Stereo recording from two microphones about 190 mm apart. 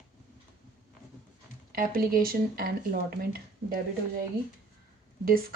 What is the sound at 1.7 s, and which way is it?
A woman's voice, 50° right (ahead or behind).